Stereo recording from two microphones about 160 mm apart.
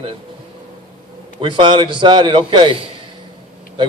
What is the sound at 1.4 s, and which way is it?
A man's voice, 30° right (ahead or behind).